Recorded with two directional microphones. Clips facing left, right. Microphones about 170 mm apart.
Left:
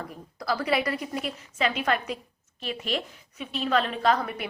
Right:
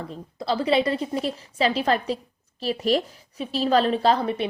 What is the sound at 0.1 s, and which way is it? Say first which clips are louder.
A woman's voice: right 5 dB; 25° right (ahead or behind).